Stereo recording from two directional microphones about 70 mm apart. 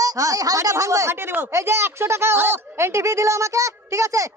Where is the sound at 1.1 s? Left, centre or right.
Right.